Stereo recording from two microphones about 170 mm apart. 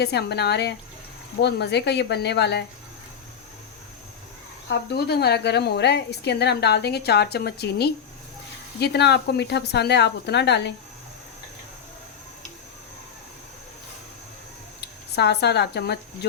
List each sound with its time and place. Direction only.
0.0 s a woman's voice: 75° left (ahead or behind)
4.7 s a woman's voice: 75° left (ahead or behind)
14.8 s speech: 80° left